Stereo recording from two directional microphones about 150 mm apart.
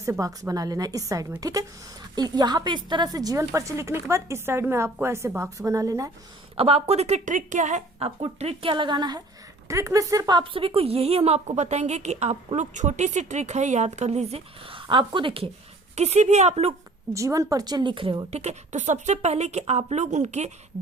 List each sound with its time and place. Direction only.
0.0 s a woman's voice: 20° right (ahead or behind)
6.6 s a woman's voice: 40° right (ahead or behind)
16.0 s a woman's voice: 45° right (ahead or behind)
17.2 s a woman's voice: 20° right (ahead or behind)
18.3 s a woman's voice: 45° right (ahead or behind)